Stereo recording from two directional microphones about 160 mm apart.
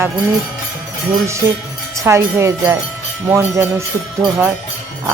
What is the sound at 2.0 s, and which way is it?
Jingle bell, 15° right (ahead or behind).